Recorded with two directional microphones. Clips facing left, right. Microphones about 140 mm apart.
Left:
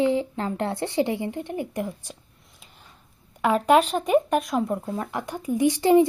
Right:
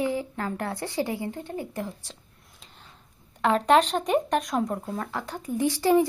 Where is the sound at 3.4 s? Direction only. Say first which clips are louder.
Left 1 dB; 10° left (ahead or behind).